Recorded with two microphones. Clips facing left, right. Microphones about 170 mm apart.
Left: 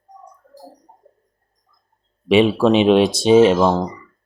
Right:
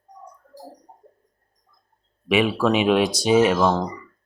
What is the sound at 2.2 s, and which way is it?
Speech, 25° left (ahead or behind).